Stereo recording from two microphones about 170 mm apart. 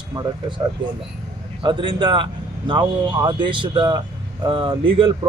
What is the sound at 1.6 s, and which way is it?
A man's voice, 30° right (ahead or behind).